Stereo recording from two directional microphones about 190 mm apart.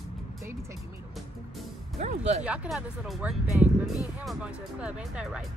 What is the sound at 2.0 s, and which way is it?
Speech, 40° right (ahead or behind).